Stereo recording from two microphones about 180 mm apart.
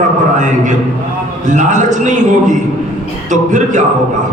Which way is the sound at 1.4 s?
45° right (ahead or behind).